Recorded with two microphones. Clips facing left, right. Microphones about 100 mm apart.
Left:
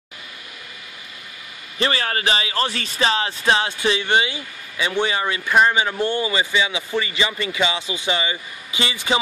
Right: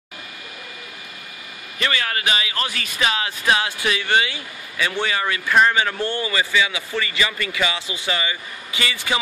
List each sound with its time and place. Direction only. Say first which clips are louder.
1.8 s speech: left 2 dB; 30° left (ahead or behind)